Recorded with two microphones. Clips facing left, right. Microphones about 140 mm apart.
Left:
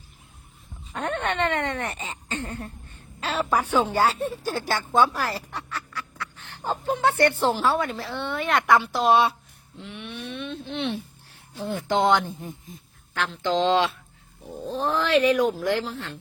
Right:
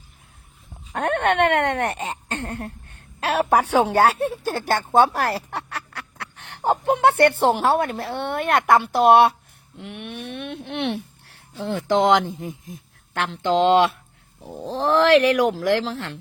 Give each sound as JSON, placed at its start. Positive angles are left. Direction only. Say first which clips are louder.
{"t": 0.9, "sound": "speech", "louder": "right 6 dB", "side_deg": -60}
{"t": 14.6, "sound": "speech", "louder": "right 7 dB", "side_deg": -75}